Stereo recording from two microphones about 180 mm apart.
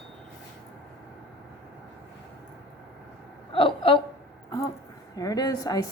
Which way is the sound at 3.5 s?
30° left (ahead or behind).